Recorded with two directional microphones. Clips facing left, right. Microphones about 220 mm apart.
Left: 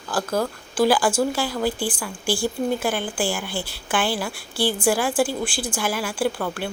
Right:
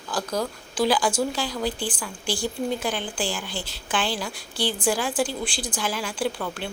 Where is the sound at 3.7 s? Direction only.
55° left (ahead or behind).